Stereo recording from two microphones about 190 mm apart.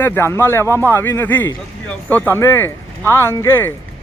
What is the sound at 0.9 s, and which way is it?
Speech, 10° left (ahead or behind).